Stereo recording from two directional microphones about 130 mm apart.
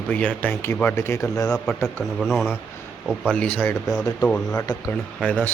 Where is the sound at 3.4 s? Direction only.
10° left (ahead or behind).